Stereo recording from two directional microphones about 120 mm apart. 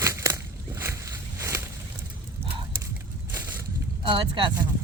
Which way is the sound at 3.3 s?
15° right (ahead or behind).